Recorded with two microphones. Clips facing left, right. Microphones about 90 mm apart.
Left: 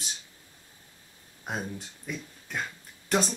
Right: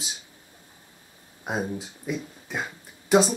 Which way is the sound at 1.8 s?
5° right (ahead or behind).